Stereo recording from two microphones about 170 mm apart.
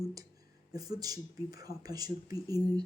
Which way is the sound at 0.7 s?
20° right (ahead or behind).